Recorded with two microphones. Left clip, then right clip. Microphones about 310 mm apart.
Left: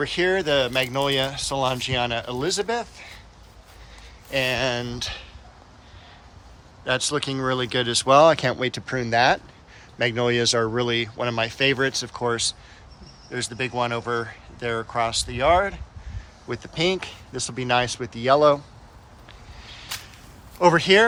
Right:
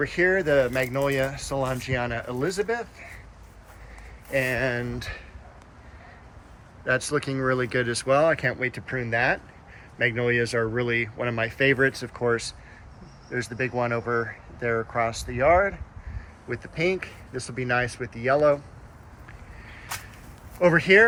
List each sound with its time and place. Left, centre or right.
0.0 s speech: centre
4.3 s speech: centre
6.8 s speech: centre
20.6 s speech: centre